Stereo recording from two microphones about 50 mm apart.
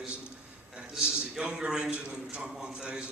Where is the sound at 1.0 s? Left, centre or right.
Centre.